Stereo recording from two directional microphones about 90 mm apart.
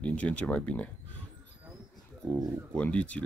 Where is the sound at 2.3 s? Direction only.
10° left (ahead or behind).